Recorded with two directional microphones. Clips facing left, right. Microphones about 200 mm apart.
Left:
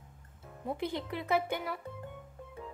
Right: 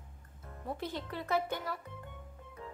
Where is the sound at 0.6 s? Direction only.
15° left (ahead or behind).